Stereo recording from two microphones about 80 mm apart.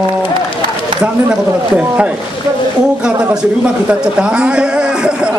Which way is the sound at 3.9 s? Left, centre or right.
Centre.